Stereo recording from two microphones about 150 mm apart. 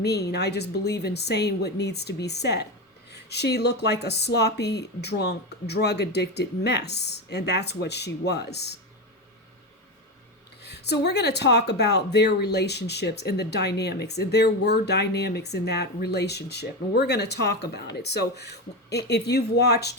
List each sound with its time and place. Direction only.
0.3 s speech: 90° left
10.6 s speech: 90° left